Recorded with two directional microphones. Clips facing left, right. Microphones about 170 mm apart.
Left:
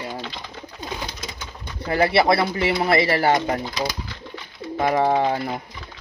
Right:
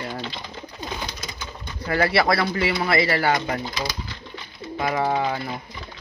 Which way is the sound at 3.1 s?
40° left (ahead or behind).